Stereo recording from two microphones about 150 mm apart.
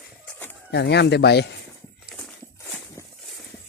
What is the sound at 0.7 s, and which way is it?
Speech, 90° left.